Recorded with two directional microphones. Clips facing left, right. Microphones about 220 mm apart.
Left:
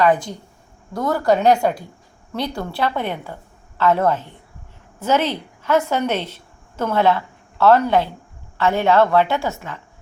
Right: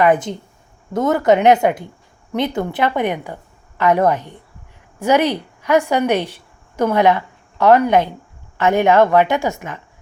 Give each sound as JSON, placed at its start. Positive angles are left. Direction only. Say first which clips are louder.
{"t": 0.0, "sound": "a woman's voice", "louder": "right 2 dB", "side_deg": -20}